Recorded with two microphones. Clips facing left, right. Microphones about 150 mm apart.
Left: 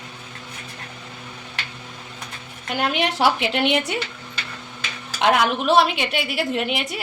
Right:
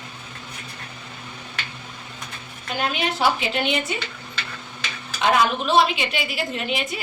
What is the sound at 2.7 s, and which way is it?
A woman's voice, 70° left (ahead or behind).